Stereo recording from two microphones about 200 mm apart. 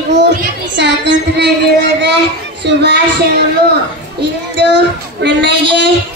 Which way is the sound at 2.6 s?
60° right (ahead or behind).